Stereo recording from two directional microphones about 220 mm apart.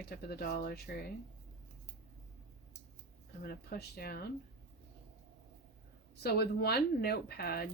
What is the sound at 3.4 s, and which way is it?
Speech, 45° left (ahead or behind).